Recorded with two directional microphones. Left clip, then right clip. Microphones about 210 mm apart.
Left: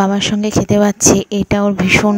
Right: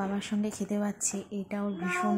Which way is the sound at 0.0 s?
40° left (ahead or behind).